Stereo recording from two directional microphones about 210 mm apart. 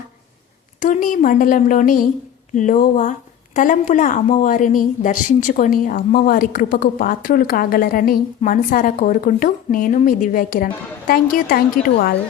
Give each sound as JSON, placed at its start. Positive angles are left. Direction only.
{"t": 0.8, "sound": "a woman's voice", "side_deg": 40}